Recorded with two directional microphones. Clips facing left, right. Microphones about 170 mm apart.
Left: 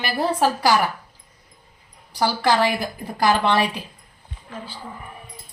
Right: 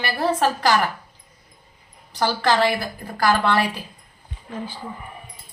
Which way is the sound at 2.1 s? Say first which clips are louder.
Even; 10° left (ahead or behind).